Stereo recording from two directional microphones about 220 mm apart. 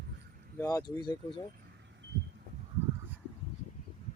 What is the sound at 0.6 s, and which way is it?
Speech, 15° left (ahead or behind).